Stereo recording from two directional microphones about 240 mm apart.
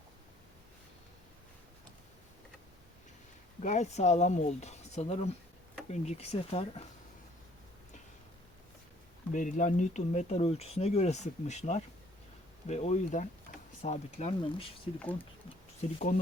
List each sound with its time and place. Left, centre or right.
3.6 s speech: left
9.3 s speech: left
13.5 s a sound: left
13.8 s speech: left
15.8 s speech: left